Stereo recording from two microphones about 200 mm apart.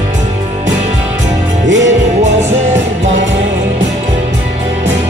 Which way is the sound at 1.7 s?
70° right (ahead or behind).